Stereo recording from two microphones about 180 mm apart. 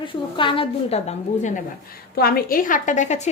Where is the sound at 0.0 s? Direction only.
30° left (ahead or behind).